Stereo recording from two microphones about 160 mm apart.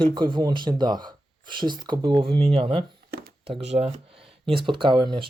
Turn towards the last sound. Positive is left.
turn(degrees=-30)  # may be behind; listen again after turning